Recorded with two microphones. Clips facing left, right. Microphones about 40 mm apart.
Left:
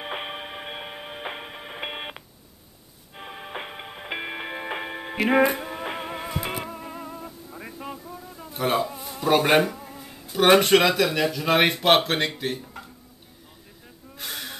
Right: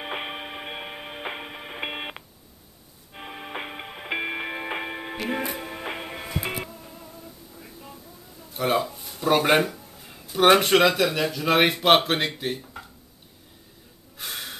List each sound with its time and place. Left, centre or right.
0.0 s music: centre
6.7 s music: left
8.5 s speech: centre
14.1 s gasp: centre